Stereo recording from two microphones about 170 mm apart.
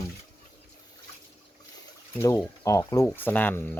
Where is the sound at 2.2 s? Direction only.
15° left (ahead or behind).